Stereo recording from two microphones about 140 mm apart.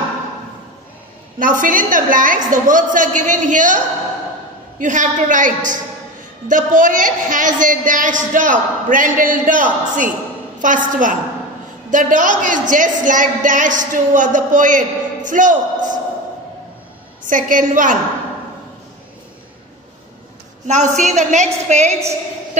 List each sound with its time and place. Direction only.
1.4 s a woman's voice: 75° right (ahead or behind)
17.3 s a woman's voice: 70° right (ahead or behind)
20.6 s a woman's voice: 60° right (ahead or behind)